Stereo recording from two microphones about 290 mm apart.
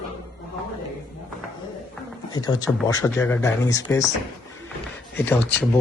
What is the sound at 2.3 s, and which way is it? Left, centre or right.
Speech, centre.